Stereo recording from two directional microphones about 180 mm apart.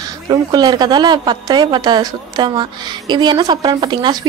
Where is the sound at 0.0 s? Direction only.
20° right (ahead or behind).